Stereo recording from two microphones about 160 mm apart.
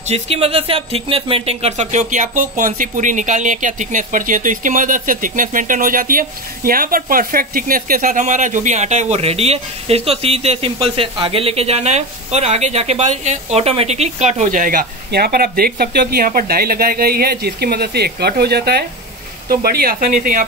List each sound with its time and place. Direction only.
0.1 s speech: 40° right (ahead or behind); by 20.4 s 60° right (ahead or behind)